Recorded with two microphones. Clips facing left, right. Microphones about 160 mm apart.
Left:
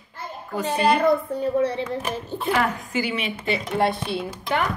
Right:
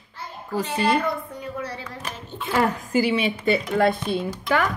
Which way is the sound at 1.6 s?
25° left (ahead or behind).